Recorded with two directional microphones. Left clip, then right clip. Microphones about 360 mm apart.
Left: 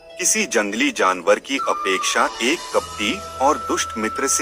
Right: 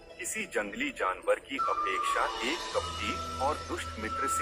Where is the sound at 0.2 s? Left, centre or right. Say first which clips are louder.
Left 14 dB; left.